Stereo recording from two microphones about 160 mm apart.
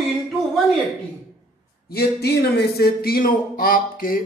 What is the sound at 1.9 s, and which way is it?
Speech, 75° left (ahead or behind).